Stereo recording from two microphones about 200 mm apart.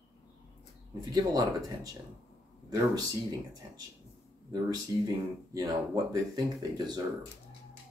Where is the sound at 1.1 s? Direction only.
20° right (ahead or behind).